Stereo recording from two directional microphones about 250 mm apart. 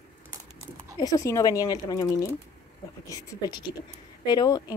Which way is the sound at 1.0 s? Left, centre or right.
Centre.